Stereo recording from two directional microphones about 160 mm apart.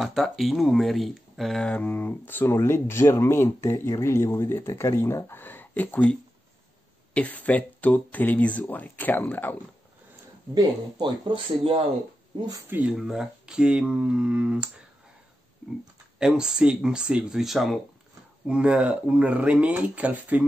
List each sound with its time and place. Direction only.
0.0 s speech: centre (ahead or behind)
7.2 s speech: 10° left (ahead or behind)
10.5 s speech: 25° right (ahead or behind)
12.4 s speech: 25° right (ahead or behind)
12.7 s speech: 5° right (ahead or behind)
16.2 s speech: 5° right (ahead or behind)